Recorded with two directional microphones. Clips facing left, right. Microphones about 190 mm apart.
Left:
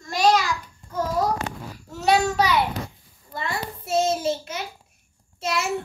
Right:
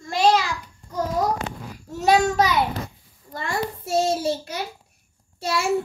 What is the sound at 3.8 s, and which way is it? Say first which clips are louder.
Child singing: even; 20° left (ahead or behind).